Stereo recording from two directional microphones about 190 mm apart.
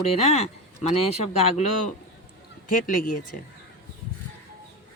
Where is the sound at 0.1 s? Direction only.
35° left (ahead or behind).